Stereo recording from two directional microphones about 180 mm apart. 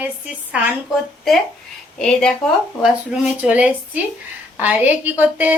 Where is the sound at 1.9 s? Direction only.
5° left (ahead or behind).